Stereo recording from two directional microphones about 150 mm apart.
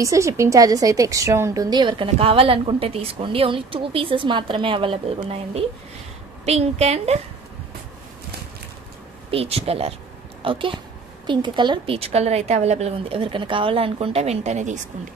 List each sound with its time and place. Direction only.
0.0 s a woman's voice: 20° right (ahead or behind); by 7.2 s 45° right (ahead or behind)
9.3 s a woman's voice: 40° right (ahead or behind)